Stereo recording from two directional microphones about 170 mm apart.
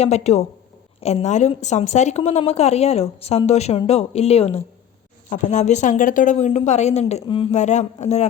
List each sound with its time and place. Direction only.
0.0 s a woman's voice: 40° left (ahead or behind)